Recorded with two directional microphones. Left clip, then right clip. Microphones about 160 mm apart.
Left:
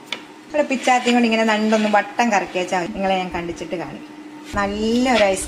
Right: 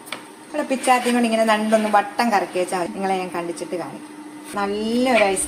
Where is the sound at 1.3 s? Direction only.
30° left (ahead or behind).